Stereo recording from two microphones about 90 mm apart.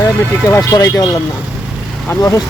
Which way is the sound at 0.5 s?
40° left (ahead or behind).